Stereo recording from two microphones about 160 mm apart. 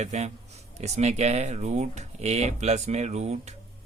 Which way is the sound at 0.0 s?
45° right (ahead or behind).